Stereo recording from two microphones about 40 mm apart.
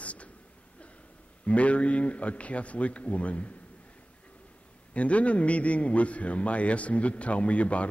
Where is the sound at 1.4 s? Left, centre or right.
Left.